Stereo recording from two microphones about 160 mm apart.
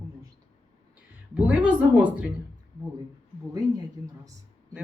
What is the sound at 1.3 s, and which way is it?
Speech, 10° right (ahead or behind).